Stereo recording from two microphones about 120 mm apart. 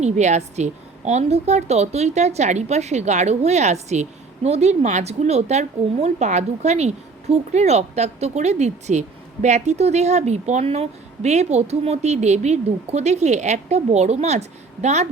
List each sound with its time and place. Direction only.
0.0 s speech: 70° right (ahead or behind)